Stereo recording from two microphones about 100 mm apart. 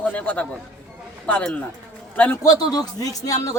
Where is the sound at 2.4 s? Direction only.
40° left (ahead or behind).